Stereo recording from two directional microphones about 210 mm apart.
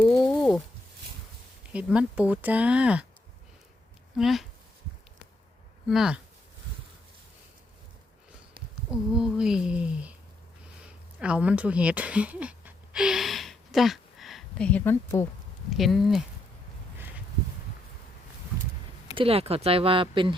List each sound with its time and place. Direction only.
0.0 s a sound: centre (ahead or behind)
1.7 s speech: 5° right (ahead or behind)
4.2 s speech: centre (ahead or behind)
5.9 s speech: centre (ahead or behind)
8.9 s speech: 5° right (ahead or behind)
11.2 s speech: 5° right (ahead or behind); by 15.3 s 10° left (ahead or behind)
15.8 s speech: centre (ahead or behind)
19.1 s speech: 25° right (ahead or behind)